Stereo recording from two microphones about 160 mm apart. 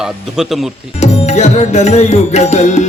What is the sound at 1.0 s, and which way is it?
Music, 45° left (ahead or behind).